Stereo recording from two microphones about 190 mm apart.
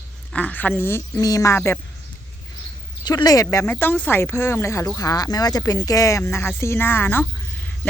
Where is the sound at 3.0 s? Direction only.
20° left (ahead or behind).